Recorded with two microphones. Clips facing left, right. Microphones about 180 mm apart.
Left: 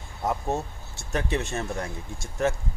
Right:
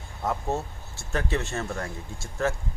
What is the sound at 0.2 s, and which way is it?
Speech, 15° left (ahead or behind).